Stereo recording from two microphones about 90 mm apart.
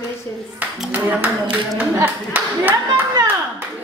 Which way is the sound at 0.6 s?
15° right (ahead or behind).